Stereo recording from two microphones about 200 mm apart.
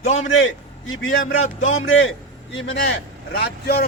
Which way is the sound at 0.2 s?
70° left (ahead or behind).